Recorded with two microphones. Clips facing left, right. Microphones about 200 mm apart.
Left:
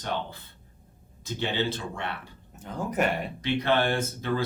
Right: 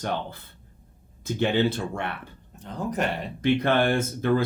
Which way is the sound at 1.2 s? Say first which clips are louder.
Right 6 dB; 55° right (ahead or behind).